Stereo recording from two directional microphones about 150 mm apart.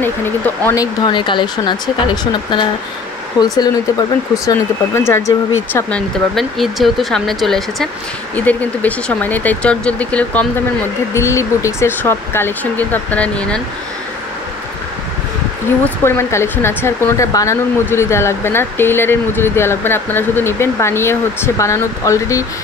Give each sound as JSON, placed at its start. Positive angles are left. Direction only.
{"t": 0.0, "sound": "speech", "side_deg": 15}
{"t": 1.0, "sound": "speech", "side_deg": 30}
{"t": 3.3, "sound": "speech", "side_deg": 30}
{"t": 4.5, "sound": "speech", "side_deg": 15}
{"t": 11.1, "sound": "speech", "side_deg": 20}
{"t": 15.8, "sound": "speech", "side_deg": 15}